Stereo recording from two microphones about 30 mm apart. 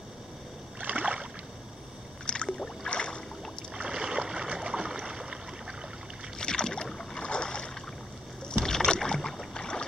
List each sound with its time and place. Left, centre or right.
0.7 s rowboat: right
2.2 s rowboat: left
2.9 s boat: left
3.7 s rowboat: right
4.8 s boat: right
6.3 s boat: left
8.6 s rowboat: centre